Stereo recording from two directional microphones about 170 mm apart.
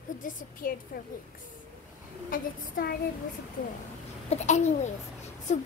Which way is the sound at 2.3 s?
55° left (ahead or behind).